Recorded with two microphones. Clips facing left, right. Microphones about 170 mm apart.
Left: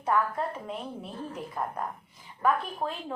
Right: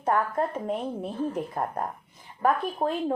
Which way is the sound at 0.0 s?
50° right (ahead or behind).